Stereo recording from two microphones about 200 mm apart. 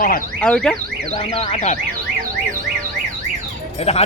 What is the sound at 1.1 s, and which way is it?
Speech, 30° left (ahead or behind).